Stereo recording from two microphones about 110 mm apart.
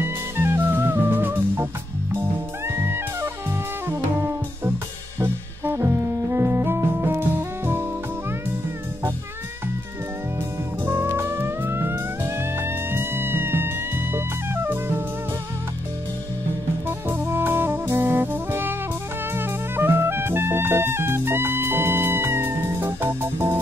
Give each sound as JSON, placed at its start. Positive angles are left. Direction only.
{"t": 0.0, "sound": "music", "side_deg": -20}
{"t": 5.2, "sound": "music", "side_deg": -20}
{"t": 10.9, "sound": "music", "side_deg": -20}
{"t": 16.8, "sound": "music", "side_deg": -20}